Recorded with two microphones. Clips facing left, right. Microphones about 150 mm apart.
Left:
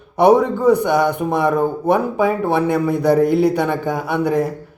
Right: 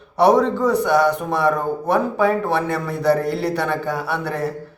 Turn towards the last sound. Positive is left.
turn(degrees=15)  # may be behind; listen again after turning